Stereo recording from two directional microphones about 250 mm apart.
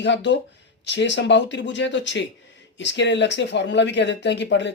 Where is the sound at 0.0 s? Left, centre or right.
Left.